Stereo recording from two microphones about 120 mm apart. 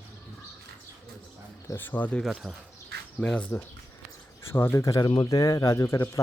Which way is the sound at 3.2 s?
10° left (ahead or behind).